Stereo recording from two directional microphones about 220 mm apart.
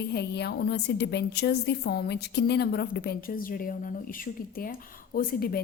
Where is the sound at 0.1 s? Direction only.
50° left (ahead or behind).